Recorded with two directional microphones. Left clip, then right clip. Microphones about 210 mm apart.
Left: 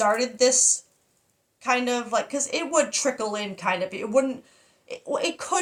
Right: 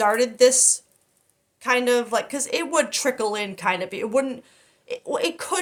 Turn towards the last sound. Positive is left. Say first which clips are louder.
# right 1 dB
turn(degrees=-40)  # may be behind; listen again after turning